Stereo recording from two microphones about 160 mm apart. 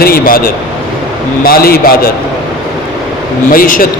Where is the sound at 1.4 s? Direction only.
70° left (ahead or behind).